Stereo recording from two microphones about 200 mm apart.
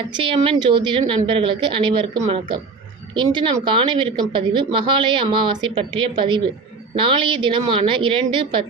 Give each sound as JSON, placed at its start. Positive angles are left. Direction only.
{"t": 0.2, "sound": "speech", "side_deg": -25}